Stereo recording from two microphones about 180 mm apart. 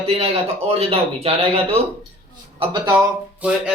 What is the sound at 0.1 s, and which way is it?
Speech, 35° right (ahead or behind).